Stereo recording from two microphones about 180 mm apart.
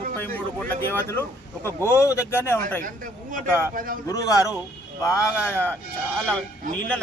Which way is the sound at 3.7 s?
50° right (ahead or behind).